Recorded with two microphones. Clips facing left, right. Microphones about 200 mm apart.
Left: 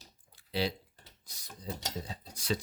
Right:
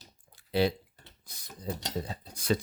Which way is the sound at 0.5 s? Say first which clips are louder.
Right 6 dB; 50° right (ahead or behind).